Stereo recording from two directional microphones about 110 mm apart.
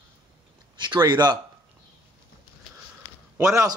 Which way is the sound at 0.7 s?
45° right (ahead or behind).